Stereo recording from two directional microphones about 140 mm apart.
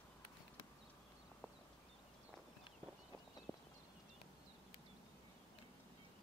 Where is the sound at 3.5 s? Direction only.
15° left (ahead or behind).